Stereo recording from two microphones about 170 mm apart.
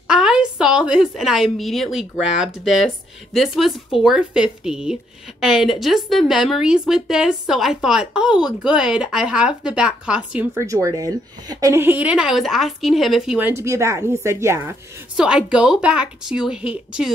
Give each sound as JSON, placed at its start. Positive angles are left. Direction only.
{"t": 0.1, "sound": "a woman's voice", "side_deg": -5}
{"t": 13.5, "sound": "a woman's voice", "side_deg": -15}